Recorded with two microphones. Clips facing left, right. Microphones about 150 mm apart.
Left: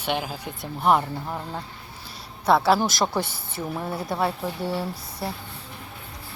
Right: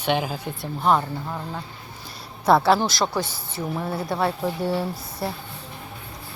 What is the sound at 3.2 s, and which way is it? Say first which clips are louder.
Speech: right 1 dB; 55° left (ahead or behind).